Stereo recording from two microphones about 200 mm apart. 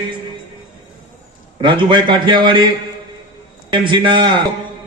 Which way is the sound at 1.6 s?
25° right (ahead or behind).